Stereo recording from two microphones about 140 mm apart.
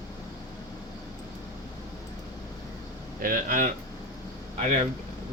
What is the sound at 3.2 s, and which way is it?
Speech, 80° right.